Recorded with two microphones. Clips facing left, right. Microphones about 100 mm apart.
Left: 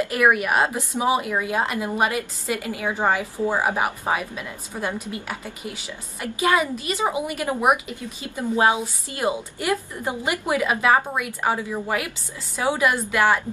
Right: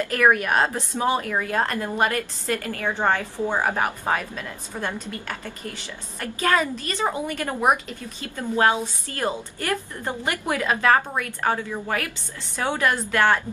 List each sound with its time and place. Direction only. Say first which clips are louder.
0.0 s a woman's voice: even; 10° left (ahead or behind)